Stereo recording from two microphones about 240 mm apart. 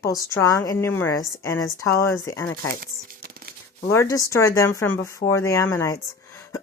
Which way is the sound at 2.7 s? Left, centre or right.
Right.